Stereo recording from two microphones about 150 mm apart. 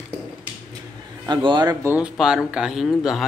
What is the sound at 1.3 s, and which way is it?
Speech, 30° right (ahead or behind).